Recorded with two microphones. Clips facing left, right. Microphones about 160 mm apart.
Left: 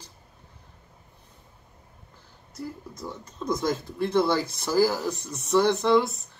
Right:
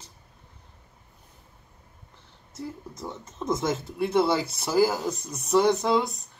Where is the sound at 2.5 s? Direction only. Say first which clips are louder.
Even; 25° right (ahead or behind).